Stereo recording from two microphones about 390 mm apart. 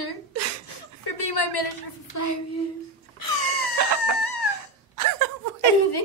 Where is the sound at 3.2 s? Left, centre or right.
Left.